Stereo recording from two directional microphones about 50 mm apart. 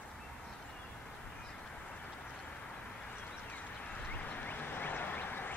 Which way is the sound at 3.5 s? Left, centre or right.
Left.